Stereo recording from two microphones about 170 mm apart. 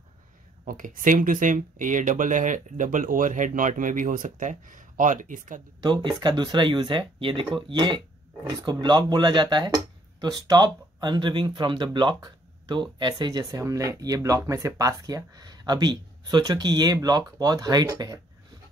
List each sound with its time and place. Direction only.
0.7 s speech: 55° right (ahead or behind)
5.8 s speech: 25° right (ahead or behind)